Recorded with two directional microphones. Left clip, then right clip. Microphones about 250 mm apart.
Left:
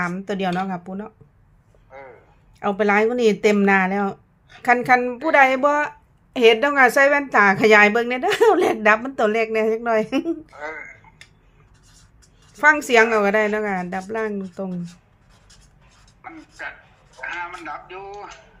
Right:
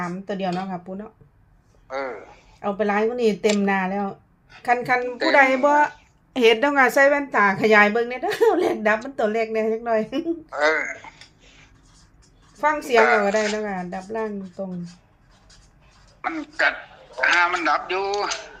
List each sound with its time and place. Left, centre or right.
0.0 s a woman's voice: left
1.9 s a man's voice: right
2.6 s a woman's voice: left
10.5 s speech: right
12.5 s a woman's voice: left
16.2 s a man's voice: right